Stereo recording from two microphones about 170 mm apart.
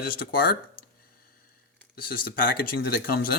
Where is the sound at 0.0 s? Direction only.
60° left (ahead or behind).